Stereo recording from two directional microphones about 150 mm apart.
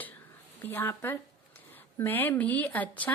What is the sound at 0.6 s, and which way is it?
A woman's voice, 15° left (ahead or behind).